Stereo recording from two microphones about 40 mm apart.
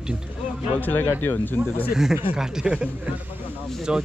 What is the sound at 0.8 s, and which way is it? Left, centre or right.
Speech, left.